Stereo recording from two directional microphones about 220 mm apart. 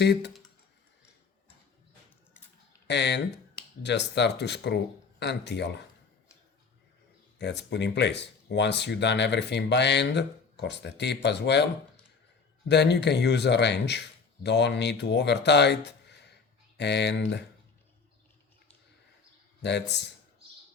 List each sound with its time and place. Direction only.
0.0 s speech: 50° left (ahead or behind)
2.8 s speech: 50° left (ahead or behind)
7.3 s speech: 50° left (ahead or behind)
19.6 s speech: 50° left (ahead or behind)